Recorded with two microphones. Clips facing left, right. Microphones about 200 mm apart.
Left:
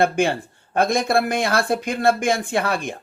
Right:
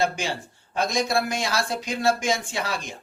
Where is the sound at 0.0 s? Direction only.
55° left (ahead or behind).